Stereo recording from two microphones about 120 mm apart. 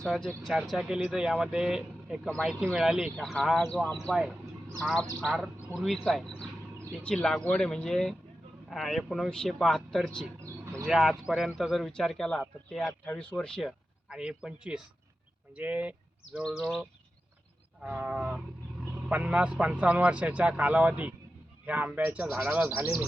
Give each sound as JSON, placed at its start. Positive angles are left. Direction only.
{"t": 0.0, "sound": "speech", "side_deg": 5}
{"t": 10.4, "sound": "a sound", "side_deg": -25}
{"t": 10.8, "sound": "speech", "side_deg": 0}
{"t": 22.7, "sound": "speech", "side_deg": -20}